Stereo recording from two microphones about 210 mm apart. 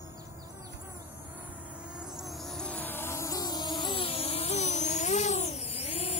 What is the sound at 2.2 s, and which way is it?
Music, 5° left (ahead or behind).